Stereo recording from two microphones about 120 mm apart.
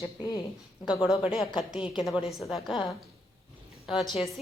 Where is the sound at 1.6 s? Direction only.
5° right (ahead or behind).